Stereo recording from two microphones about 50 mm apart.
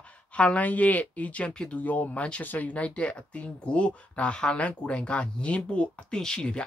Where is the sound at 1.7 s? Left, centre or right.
Left.